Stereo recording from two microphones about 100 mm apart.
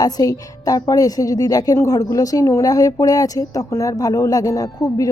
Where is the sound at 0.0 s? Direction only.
40° left (ahead or behind).